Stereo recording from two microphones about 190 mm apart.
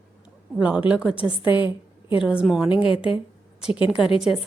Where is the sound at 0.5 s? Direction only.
5° right (ahead or behind).